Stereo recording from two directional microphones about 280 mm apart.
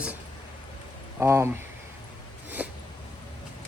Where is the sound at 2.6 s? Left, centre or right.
Centre.